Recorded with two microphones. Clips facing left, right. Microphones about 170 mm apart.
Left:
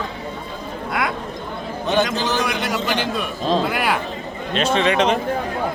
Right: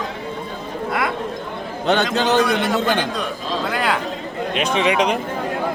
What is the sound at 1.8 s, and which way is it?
Speech, 70° right (ahead or behind).